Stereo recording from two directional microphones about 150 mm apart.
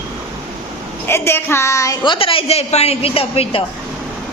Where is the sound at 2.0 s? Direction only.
35° left (ahead or behind).